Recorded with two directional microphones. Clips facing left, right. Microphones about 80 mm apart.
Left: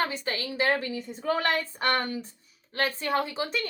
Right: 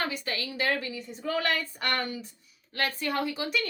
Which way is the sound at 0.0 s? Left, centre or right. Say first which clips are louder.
Left 3 dB; left.